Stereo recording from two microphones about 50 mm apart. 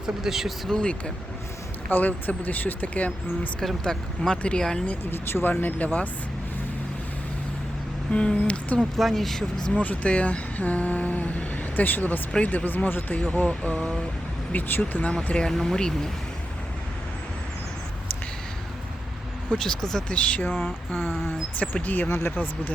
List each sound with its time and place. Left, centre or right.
0.0 s speech: centre
0.7 s speech: centre
1.9 s speech: left
3.8 s speech: centre
5.1 s speech: left
8.1 s speech: left
9.0 s speech: centre
9.7 s speech: left
12.3 s speech: left
13.1 s speech: left
14.5 s speech: left
15.0 s speech: centre
19.5 s speech: centre
20.1 s speech: left